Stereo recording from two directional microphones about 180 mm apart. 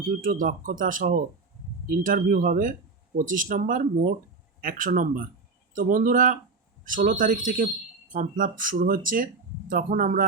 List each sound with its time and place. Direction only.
0.2 s speech: 50° right (ahead or behind)